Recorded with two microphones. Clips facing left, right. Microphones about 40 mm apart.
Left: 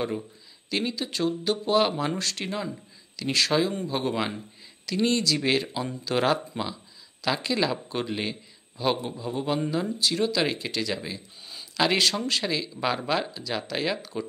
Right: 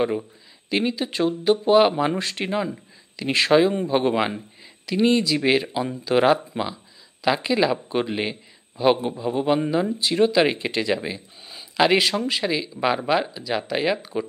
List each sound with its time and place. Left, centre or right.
0.0 s a man's voice: right